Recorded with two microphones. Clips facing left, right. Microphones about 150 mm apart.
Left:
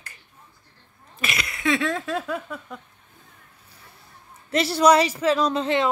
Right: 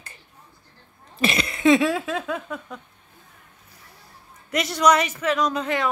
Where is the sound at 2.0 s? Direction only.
Centre (ahead or behind).